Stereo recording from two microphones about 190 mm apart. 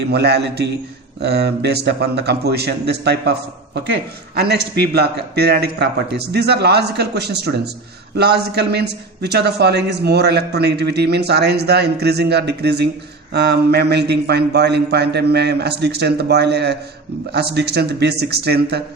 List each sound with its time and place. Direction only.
0.0 s a man's voice: 60° right (ahead or behind)